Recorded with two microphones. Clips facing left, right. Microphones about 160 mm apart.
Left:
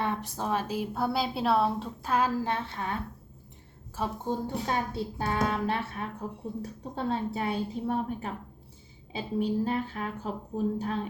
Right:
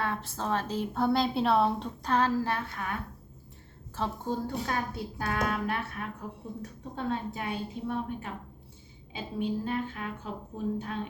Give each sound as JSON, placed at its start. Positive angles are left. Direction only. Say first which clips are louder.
{"t": 0.0, "sound": "a woman's voice", "louder": "left 2 dB", "side_deg": 15}
{"t": 2.5, "sound": "speech", "louder": "left 1 dB", "side_deg": 25}
{"t": 3.9, "sound": "a woman's voice", "louder": "left 1 dB", "side_deg": 15}